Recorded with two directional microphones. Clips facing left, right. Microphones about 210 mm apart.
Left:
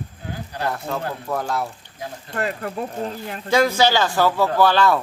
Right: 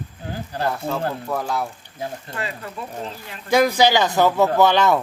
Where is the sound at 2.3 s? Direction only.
55° left (ahead or behind).